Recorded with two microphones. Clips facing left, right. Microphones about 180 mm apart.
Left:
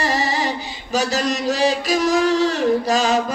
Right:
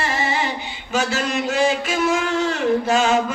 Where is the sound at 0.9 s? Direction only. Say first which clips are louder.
Left 1 dB; 40° left (ahead or behind).